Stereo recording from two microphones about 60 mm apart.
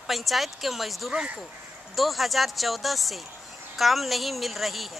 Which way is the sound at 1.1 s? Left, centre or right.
Centre.